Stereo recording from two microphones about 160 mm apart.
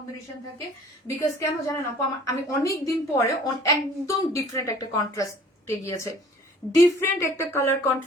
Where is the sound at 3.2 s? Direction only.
20° left (ahead or behind).